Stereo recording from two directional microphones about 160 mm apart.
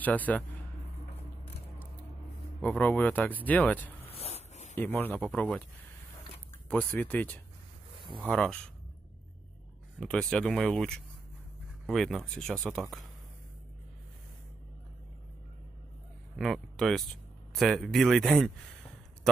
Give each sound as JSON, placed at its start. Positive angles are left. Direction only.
{"t": 0.0, "sound": "speech", "side_deg": 10}
{"t": 2.6, "sound": "speech", "side_deg": 10}
{"t": 4.1, "sound": "a sound", "side_deg": 40}
{"t": 4.7, "sound": "speech", "side_deg": 10}
{"t": 6.7, "sound": "speech", "side_deg": 10}
{"t": 9.9, "sound": "speech", "side_deg": 5}
{"t": 16.3, "sound": "speech", "side_deg": 0}